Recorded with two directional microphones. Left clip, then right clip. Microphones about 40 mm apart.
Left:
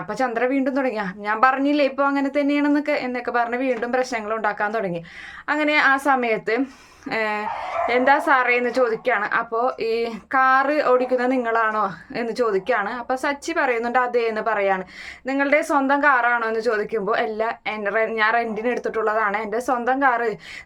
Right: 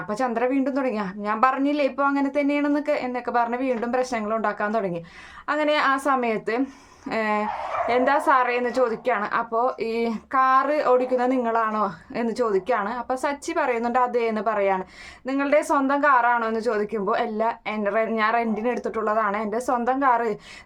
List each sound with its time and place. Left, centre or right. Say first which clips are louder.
0.1 s a woman's voice: left 2 dB; right
10.3 s a woman's voice: left 2 dB; right